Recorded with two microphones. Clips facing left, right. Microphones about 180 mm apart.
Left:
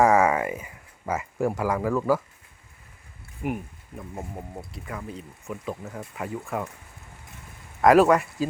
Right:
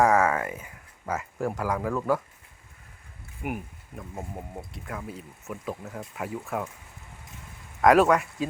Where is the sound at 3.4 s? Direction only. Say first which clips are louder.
Left 3 dB; centre (ahead or behind).